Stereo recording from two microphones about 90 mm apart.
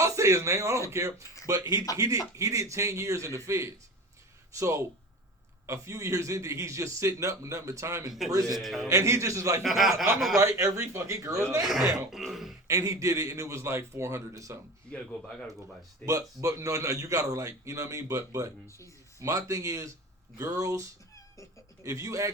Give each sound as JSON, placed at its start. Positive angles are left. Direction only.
{"t": 0.0, "sound": "a man's voice", "side_deg": -35}
{"t": 8.5, "sound": "throat clearing", "side_deg": 0}
{"t": 8.9, "sound": "a man's voice", "side_deg": -35}
{"t": 9.6, "sound": "throat clearing", "side_deg": 0}
{"t": 10.4, "sound": "a man's voice", "side_deg": -30}
{"t": 11.6, "sound": "throat clearing", "side_deg": -5}
{"t": 12.6, "sound": "a man's voice", "side_deg": -35}
{"t": 14.8, "sound": "speech", "side_deg": 10}
{"t": 16.0, "sound": "a man's voice", "side_deg": -40}